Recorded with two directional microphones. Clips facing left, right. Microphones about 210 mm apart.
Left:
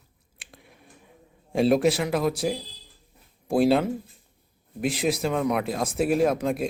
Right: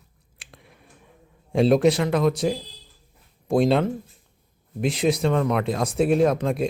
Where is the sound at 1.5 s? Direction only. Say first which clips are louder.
Right 3 dB; centre (ahead or behind).